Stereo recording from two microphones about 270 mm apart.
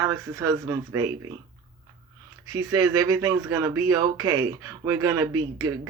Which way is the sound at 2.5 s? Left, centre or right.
Centre.